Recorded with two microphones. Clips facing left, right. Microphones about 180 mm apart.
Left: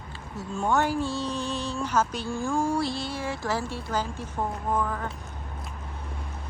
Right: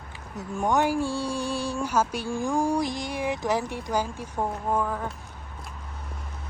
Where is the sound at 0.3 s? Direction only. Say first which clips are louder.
Right 1 dB; 15° right (ahead or behind).